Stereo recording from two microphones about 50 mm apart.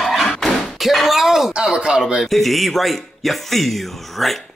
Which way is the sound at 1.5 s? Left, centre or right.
Centre.